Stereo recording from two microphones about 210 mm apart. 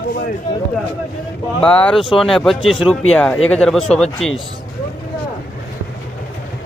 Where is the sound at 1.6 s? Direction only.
5° left (ahead or behind).